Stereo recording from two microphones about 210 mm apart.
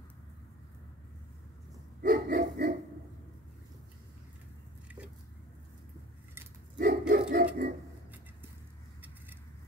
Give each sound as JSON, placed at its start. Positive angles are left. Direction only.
{"t": 2.0, "sound": "dog", "side_deg": -45}
{"t": 6.8, "sound": "dog", "side_deg": -45}